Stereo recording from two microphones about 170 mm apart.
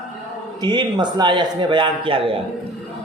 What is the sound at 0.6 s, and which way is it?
A man's voice, 25° right (ahead or behind).